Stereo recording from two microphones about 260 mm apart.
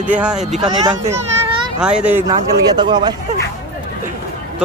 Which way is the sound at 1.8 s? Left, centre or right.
Centre.